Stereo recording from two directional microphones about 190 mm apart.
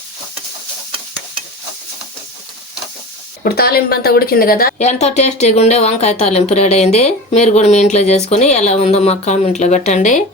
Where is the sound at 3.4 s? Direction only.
50° left (ahead or behind).